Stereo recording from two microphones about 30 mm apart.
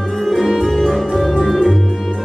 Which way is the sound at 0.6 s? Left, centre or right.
Centre.